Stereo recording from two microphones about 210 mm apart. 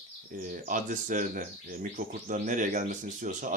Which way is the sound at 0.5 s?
40° right (ahead or behind).